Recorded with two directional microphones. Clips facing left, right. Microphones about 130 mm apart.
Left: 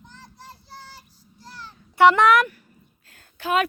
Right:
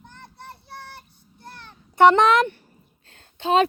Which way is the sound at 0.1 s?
60° right (ahead or behind).